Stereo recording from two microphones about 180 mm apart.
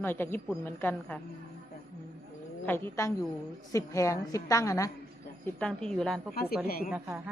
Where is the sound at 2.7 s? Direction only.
10° left (ahead or behind).